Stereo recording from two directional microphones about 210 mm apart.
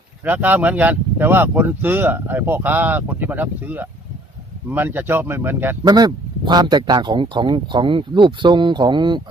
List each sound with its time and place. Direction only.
0.3 s speech: 10° right (ahead or behind)